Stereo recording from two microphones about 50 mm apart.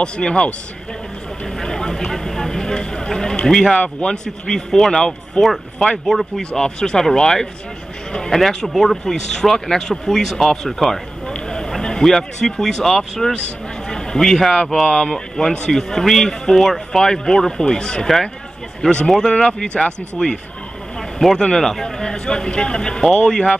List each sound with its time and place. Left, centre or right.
0.0 s speech: centre
3.7 s speech: left
5.4 s speech: centre
13.8 s a sound: centre
14.9 s speech: centre
21.4 s speech: centre